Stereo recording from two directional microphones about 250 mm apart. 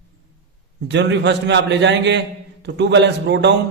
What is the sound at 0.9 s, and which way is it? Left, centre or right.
A man's voice, right.